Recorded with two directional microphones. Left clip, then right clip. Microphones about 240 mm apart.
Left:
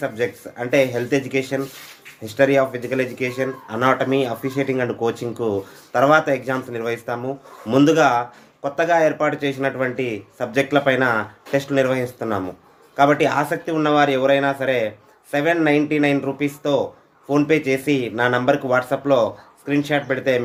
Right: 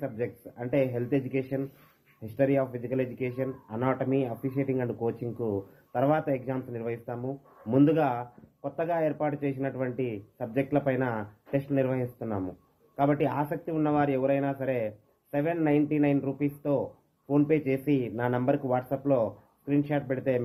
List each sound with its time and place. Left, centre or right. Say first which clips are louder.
0.0 s speech: left 10 dB; centre